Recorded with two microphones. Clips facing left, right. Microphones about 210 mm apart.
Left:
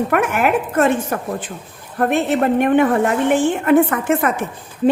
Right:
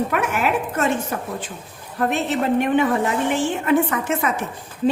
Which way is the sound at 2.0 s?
55° left (ahead or behind).